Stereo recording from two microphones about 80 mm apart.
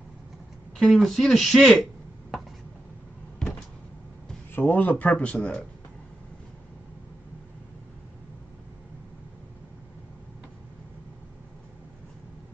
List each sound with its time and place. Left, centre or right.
0.7 s a man's voice: centre
3.3 s a sound: centre
4.6 s speech: left